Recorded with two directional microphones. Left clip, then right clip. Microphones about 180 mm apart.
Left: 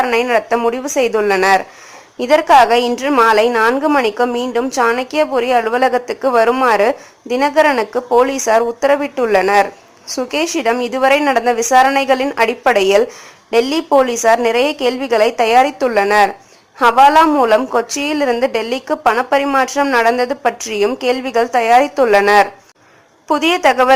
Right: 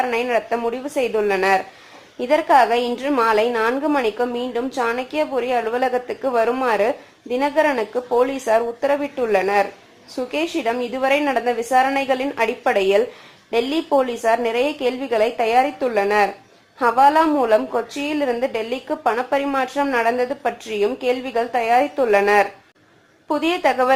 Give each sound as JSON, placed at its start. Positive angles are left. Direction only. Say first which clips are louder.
{"t": 0.0, "sound": "a woman's voice", "louder": "left 6 dB", "side_deg": 30}